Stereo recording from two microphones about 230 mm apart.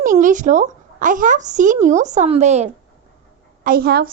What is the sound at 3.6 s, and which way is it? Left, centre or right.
Speech, right.